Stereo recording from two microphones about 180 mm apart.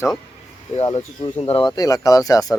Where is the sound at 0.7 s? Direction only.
40° left (ahead or behind).